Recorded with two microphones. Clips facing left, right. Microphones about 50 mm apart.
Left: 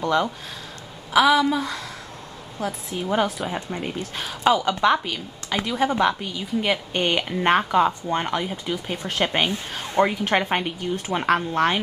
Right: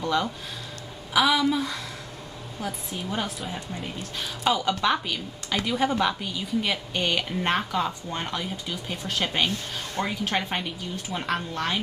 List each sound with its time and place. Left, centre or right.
0.0 s speech: left
1.1 s a woman's voice: centre
1.4 s a woman's voice: centre
6.6 s speech: left